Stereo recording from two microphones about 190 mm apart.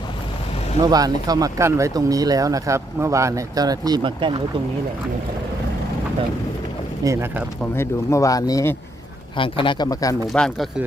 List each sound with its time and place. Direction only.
0.8 s speech: 20° right (ahead or behind)
7.0 s speech: 15° right (ahead or behind)
7.8 s speech: 15° left (ahead or behind)
10.3 s speech: 5° left (ahead or behind)